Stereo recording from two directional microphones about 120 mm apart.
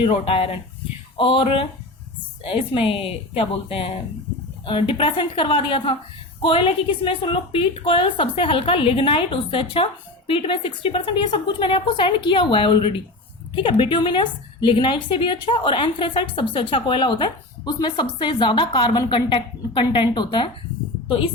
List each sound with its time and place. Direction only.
0.0 s a woman's voice: 50° left (ahead or behind)